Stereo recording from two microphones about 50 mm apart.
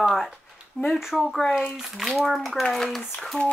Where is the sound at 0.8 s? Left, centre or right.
Left.